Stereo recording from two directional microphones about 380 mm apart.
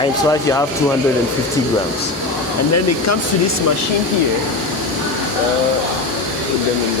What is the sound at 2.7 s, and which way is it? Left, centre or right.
Speech, left.